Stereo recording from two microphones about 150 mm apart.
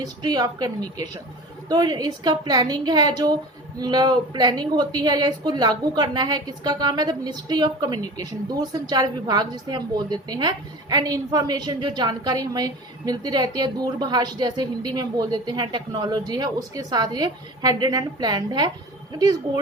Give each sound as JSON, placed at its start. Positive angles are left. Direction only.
{"t": 0.0, "sound": "a woman's voice", "side_deg": -25}